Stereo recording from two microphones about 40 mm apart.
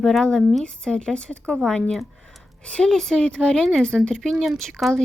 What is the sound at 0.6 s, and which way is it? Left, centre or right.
Speech, left.